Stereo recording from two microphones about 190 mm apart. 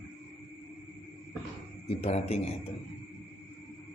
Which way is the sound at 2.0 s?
35° left (ahead or behind).